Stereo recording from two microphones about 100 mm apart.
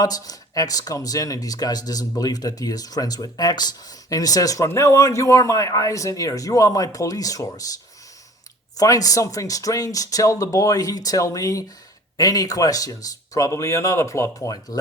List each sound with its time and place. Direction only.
0.0 s speech: 40° left (ahead or behind)
8.8 s speech: 35° left (ahead or behind)